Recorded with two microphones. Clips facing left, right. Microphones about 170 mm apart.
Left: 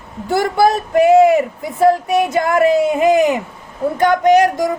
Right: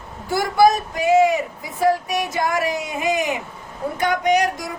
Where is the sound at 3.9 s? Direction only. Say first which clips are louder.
Left 7 dB; 50° left (ahead or behind).